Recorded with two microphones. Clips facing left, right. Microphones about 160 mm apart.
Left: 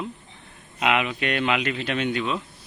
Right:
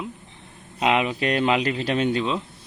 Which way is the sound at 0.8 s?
35° right (ahead or behind).